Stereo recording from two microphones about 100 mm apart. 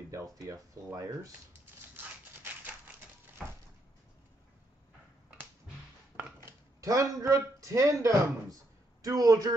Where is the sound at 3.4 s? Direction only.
Centre (ahead or behind).